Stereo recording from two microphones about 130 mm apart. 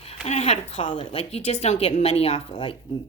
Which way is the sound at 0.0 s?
55° left (ahead or behind).